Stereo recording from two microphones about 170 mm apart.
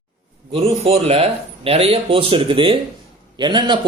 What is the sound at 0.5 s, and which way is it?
Speech, 35° right (ahead or behind).